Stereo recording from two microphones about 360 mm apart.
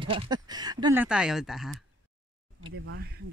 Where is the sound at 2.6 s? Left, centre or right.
Right.